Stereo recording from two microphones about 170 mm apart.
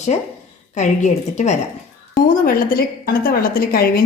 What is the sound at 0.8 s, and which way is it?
Speech, 45° left (ahead or behind).